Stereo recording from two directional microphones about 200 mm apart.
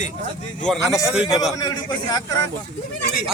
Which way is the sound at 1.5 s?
20° left (ahead or behind).